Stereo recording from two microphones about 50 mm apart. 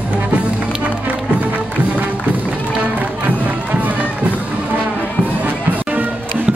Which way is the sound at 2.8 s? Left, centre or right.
Right.